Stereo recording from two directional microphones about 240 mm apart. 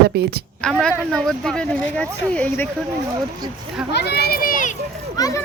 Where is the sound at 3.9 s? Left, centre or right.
Left.